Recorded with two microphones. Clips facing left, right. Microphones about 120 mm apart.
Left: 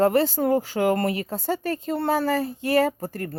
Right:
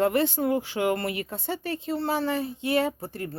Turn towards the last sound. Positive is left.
turn(degrees=45)  # may be behind; listen again after turning